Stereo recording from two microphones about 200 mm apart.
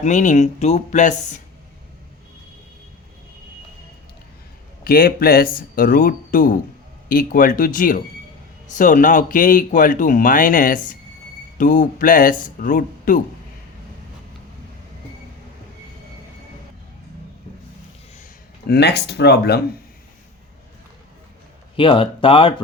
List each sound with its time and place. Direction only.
0.0 s speech: 40° left (ahead or behind)
4.8 s speech: 50° left (ahead or behind)
18.7 s speech: 55° left (ahead or behind)
21.8 s speech: 25° left (ahead or behind)